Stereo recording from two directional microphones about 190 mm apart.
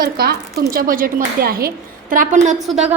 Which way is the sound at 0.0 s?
55° right (ahead or behind).